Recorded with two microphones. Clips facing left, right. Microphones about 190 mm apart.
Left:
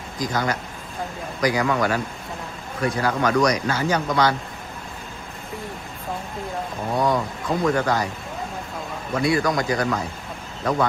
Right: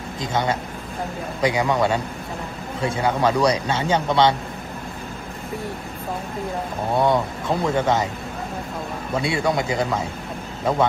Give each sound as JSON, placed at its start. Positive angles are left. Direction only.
{"t": 0.2, "sound": "speech", "side_deg": -25}
{"t": 6.9, "sound": "speech", "side_deg": -25}
{"t": 9.1, "sound": "speech", "side_deg": -25}